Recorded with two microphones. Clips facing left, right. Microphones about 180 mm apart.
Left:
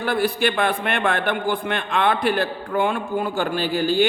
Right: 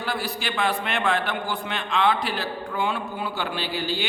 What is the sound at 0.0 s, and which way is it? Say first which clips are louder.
A man's voice: left 8 dB; 55° left (ahead or behind).